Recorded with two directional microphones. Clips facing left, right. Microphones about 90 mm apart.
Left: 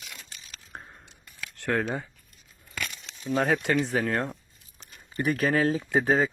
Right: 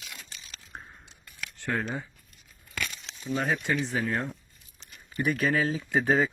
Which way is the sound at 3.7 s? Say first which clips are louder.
Left 3 dB; 50° left (ahead or behind).